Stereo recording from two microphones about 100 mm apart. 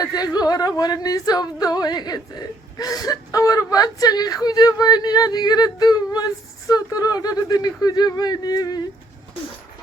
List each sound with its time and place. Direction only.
0.0 s speech: 40° left (ahead or behind)